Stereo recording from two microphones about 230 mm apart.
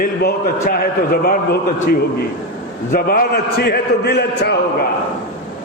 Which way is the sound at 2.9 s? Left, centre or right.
Left.